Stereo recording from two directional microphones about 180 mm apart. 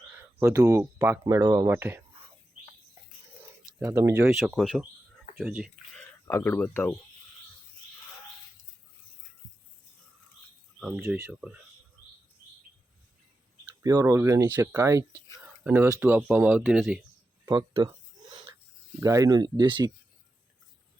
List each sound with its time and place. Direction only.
0.4 s speech: 15° right (ahead or behind)
3.8 s speech: 15° right (ahead or behind)
4.4 s speech: centre (ahead or behind)
5.9 s a sound: 5° left (ahead or behind)
6.3 s speech: 10° left (ahead or behind)
10.8 s speech: 5° right (ahead or behind)
13.8 s speech: 20° right (ahead or behind)
17.4 s a sound: 15° right (ahead or behind)
18.9 s speech: 20° right (ahead or behind)